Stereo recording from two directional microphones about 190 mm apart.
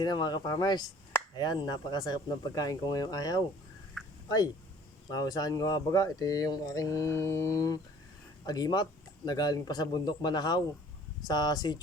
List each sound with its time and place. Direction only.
0.0 s speech: 20° left (ahead or behind)
4.0 s a sound: centre (ahead or behind)
5.1 s speech: 20° left (ahead or behind)